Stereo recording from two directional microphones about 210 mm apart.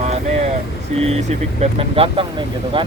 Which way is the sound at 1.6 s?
25° right (ahead or behind).